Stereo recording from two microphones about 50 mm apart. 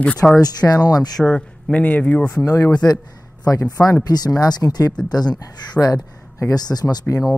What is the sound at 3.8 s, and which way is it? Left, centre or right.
Speech, left.